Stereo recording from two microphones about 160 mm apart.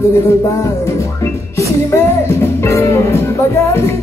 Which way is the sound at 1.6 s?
15° left (ahead or behind).